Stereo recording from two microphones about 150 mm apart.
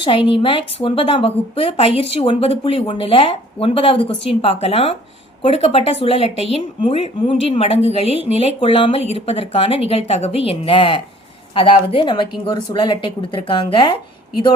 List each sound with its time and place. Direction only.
0.0 s a woman's voice: 35° left (ahead or behind)